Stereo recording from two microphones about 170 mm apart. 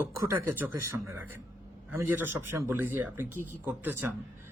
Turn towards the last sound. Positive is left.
turn(degrees=-10)  # may be behind; listen again after turning